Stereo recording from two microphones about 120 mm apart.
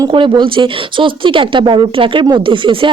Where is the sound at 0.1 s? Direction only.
45° right (ahead or behind).